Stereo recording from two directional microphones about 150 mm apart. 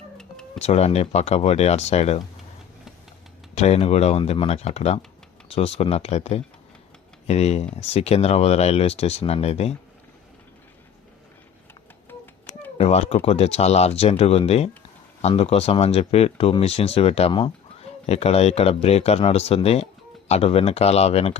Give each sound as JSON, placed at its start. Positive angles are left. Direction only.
{"t": 0.2, "sound": "guitar", "side_deg": 5}
{"t": 0.6, "sound": "speech", "side_deg": 45}
{"t": 3.5, "sound": "speech", "side_deg": 45}
{"t": 12.7, "sound": "speech", "side_deg": 45}